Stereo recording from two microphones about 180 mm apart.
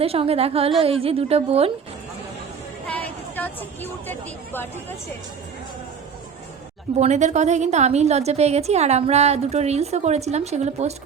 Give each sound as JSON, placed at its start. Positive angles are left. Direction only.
{"t": 0.0, "sound": "a woman's voice", "side_deg": -35}
{"t": 2.8, "sound": "a sound", "side_deg": 10}
{"t": 4.0, "sound": "speech", "side_deg": 10}
{"t": 7.0, "sound": "a woman's voice", "side_deg": -40}